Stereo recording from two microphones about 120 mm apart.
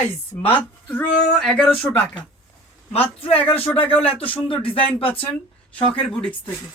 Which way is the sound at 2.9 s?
50° left (ahead or behind).